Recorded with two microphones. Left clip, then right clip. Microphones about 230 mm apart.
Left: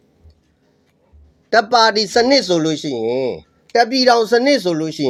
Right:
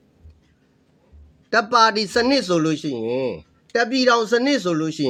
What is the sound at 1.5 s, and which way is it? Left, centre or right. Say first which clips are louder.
Speech: left 3 dB; centre.